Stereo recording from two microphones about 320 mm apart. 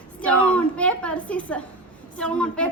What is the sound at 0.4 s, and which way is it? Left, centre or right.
A woman's voice, centre.